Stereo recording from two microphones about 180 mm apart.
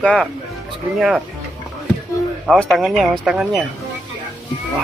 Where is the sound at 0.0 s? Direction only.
5° left (ahead or behind).